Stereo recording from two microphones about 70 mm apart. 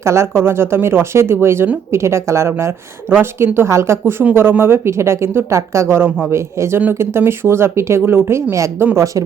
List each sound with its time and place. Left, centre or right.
0.0 s speech: right